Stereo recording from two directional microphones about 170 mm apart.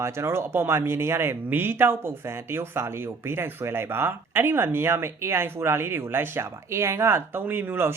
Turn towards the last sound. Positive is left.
turn(degrees=-15)  # may be behind; listen again after turning